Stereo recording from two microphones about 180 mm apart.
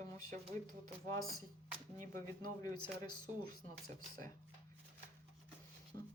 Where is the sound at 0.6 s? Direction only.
20° left (ahead or behind).